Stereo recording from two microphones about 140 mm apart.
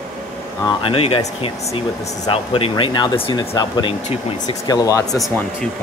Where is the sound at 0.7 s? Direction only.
40° left (ahead or behind).